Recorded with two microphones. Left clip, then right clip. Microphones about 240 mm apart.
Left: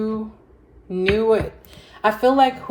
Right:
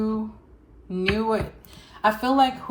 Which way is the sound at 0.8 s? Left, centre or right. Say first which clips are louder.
Left 5 dB; centre.